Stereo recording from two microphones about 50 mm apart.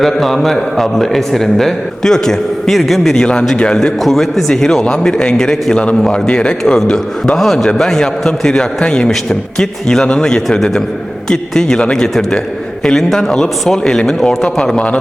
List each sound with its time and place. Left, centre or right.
0.0 s a man's voice: centre
3.1 s a man's voice: centre
4.0 s a man's voice: centre